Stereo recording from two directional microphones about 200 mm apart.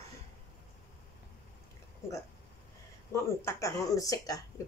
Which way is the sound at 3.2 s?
15° left (ahead or behind).